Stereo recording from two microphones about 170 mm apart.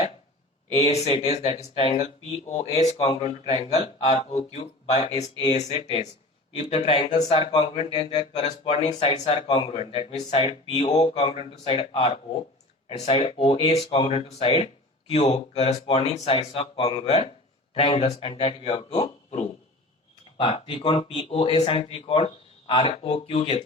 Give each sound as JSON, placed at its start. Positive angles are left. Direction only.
{"t": 0.8, "sound": "speech", "side_deg": 40}